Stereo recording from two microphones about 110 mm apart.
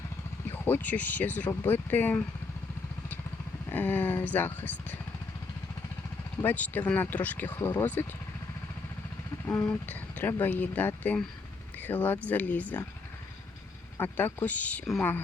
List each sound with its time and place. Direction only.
0.6 s speech: 15° left (ahead or behind)
3.7 s speech: 15° left (ahead or behind)
6.4 s speech: 15° left (ahead or behind)
9.6 s speech: 15° left (ahead or behind)
14.0 s speech: 20° left (ahead or behind)